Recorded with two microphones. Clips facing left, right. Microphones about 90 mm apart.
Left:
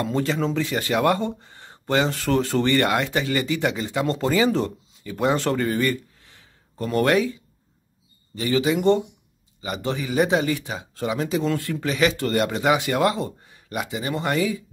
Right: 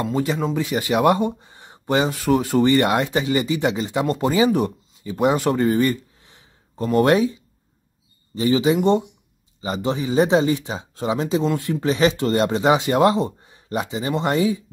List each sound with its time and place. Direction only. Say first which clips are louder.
0.0 s speech: right 1 dB; 15° right (ahead or behind)
8.4 s speech: right 4 dB; 20° right (ahead or behind)